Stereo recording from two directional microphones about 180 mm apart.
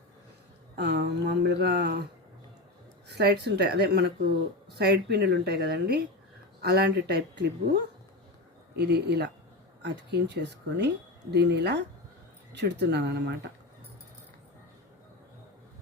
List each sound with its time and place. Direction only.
0.8 s speech: 70° right (ahead or behind)
3.1 s speech: 65° right (ahead or behind)
8.7 s speech: 65° right (ahead or behind)